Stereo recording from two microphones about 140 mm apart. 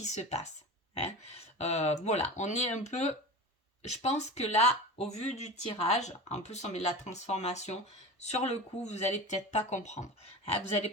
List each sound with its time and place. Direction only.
0.0 s speech: 55° left (ahead or behind)
1.5 s speech: 50° left (ahead or behind)